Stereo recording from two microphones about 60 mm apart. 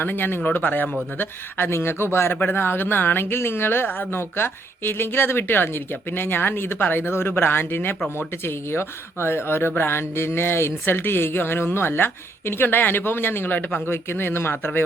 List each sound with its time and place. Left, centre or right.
0.0 s speech: left